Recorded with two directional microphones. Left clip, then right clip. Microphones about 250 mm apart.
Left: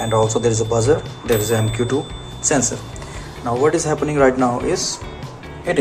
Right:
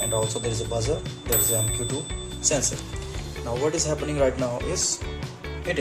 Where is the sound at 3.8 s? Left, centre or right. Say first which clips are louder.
Left 8 dB; centre.